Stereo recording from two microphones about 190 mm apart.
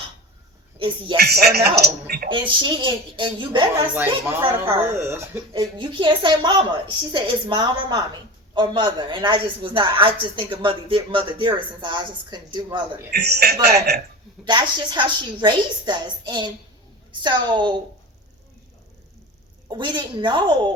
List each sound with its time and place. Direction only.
1.1 s speech: 55° right (ahead or behind)
2.3 s speech: 25° right (ahead or behind)
4.9 s speech: 10° right (ahead or behind)
5.8 s speech: 25° right (ahead or behind)
13.1 s speech: 60° right (ahead or behind)
14.4 s speech: 25° right (ahead or behind)
19.7 s speech: 25° right (ahead or behind)